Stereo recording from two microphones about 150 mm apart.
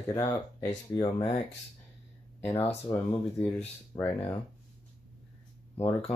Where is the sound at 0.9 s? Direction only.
30° left (ahead or behind).